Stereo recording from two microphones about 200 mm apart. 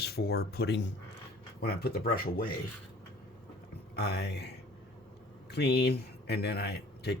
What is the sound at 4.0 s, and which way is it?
Speech, 55° left (ahead or behind).